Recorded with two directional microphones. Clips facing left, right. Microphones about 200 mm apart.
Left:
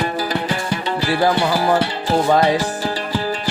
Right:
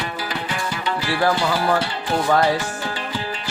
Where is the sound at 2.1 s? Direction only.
30° left (ahead or behind).